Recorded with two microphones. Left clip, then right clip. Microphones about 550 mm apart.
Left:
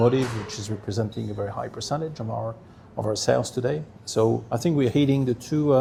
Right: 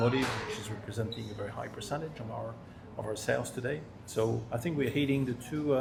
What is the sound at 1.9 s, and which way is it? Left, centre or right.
Speech, left.